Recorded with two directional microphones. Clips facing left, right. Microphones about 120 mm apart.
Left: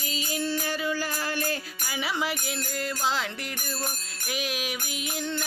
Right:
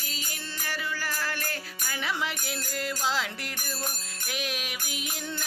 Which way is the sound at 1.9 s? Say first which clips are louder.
Left 3 dB; 5° left (ahead or behind).